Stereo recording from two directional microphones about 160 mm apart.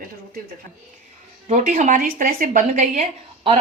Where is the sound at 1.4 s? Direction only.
50° right (ahead or behind).